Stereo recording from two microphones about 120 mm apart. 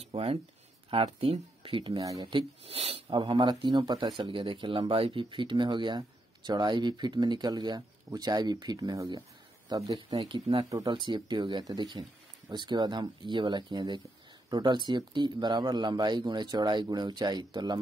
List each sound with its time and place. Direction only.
0.0 s speech: 55° right (ahead or behind)
3.1 s speech: 40° right (ahead or behind)